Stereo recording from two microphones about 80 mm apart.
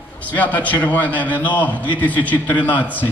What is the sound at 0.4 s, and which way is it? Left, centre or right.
A man's voice, centre.